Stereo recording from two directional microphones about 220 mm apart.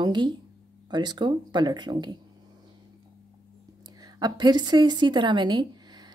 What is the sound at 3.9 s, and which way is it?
A woman's voice, 20° right (ahead or behind).